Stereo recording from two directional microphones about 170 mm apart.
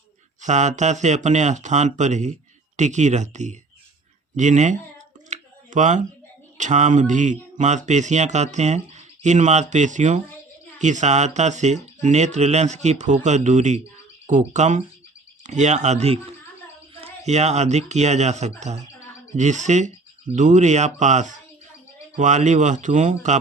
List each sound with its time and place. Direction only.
0.4 s speech: 45° right (ahead or behind)
5.3 s a sound: 45° right (ahead or behind)
6.6 s speech: 45° right (ahead or behind)